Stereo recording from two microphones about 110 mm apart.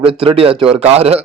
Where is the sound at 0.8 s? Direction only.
70° right (ahead or behind).